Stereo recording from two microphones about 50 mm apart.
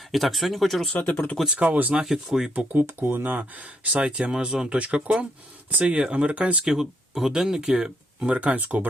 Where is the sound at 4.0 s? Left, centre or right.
Right.